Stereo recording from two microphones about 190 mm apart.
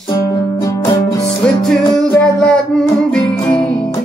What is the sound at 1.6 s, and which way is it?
Music, 5° left (ahead or behind).